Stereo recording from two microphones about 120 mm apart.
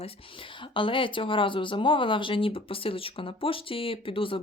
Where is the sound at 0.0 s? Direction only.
45° left (ahead or behind).